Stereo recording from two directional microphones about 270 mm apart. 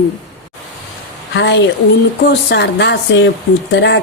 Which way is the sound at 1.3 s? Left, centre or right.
Left.